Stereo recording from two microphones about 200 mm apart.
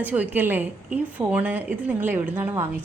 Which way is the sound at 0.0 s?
10° right (ahead or behind).